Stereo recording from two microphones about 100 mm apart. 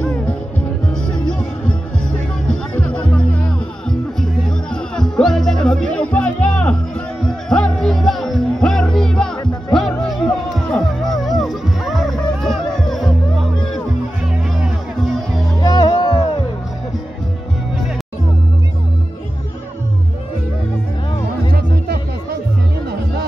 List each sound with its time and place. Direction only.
1.0 s music: 10° left (ahead or behind)
9.4 s music: 45° left (ahead or behind)
9.8 s music: centre (ahead or behind)
15.6 s music: 40° left (ahead or behind)